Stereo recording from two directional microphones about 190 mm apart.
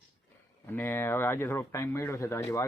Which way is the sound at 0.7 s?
10° left (ahead or behind).